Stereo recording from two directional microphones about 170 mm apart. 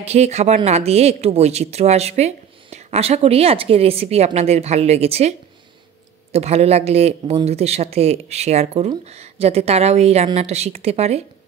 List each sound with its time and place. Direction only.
0.0 s speech: 40° right (ahead or behind)
6.3 s speech: 40° right (ahead or behind)